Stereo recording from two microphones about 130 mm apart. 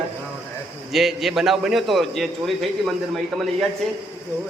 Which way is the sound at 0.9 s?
Centre (ahead or behind).